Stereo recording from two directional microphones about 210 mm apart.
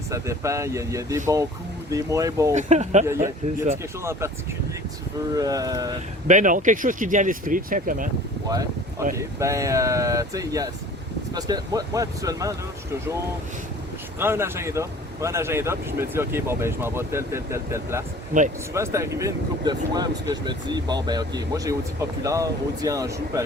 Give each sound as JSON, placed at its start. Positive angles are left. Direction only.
{"t": 0.1, "sound": "speech", "side_deg": -15}
{"t": 2.6, "sound": "speech", "side_deg": -35}
{"t": 4.0, "sound": "speech", "side_deg": -15}
{"t": 5.3, "sound": "speech", "side_deg": -15}
{"t": 6.2, "sound": "speech", "side_deg": -35}
{"t": 8.4, "sound": "speech", "side_deg": -15}
{"t": 14.2, "sound": "speech", "side_deg": -10}
{"t": 18.3, "sound": "speech", "side_deg": -35}
{"t": 18.7, "sound": "speech", "side_deg": -15}